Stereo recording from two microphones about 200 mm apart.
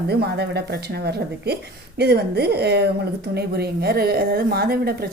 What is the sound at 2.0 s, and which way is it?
A woman's voice, 55° right (ahead or behind).